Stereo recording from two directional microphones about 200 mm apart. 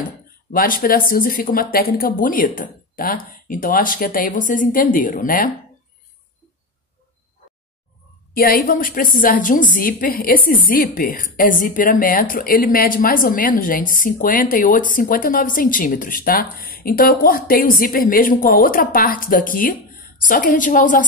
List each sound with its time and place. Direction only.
0.5 s a woman's voice: 45° left (ahead or behind)
8.4 s a woman's voice: 45° left (ahead or behind)